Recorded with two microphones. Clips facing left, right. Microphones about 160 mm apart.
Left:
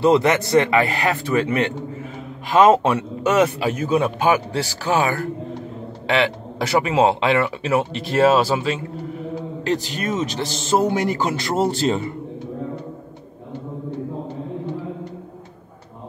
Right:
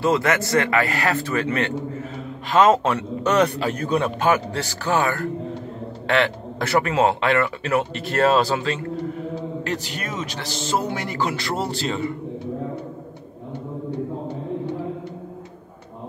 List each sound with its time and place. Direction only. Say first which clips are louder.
0.0 s speech: left 4 dB; 20° left (ahead or behind)
9.7 s a man's voice: left 6 dB; 20° left (ahead or behind)
11.2 s speech: left 5 dB; 40° left (ahead or behind)